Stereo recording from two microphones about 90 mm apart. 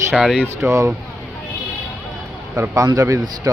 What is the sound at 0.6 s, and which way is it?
Speech, 30° right (ahead or behind).